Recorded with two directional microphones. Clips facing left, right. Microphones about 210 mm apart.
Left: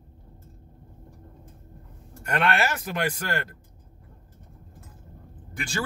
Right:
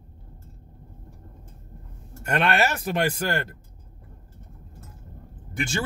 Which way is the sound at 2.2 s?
25° right (ahead or behind).